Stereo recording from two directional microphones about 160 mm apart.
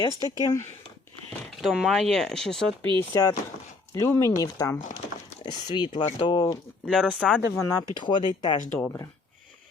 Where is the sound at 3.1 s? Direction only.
20° left (ahead or behind).